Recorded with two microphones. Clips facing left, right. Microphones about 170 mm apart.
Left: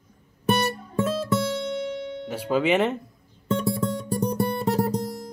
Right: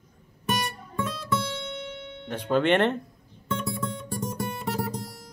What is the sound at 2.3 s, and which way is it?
Speech, 5° left (ahead or behind).